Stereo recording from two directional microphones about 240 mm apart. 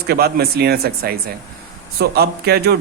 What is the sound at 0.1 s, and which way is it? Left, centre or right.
Speech, right.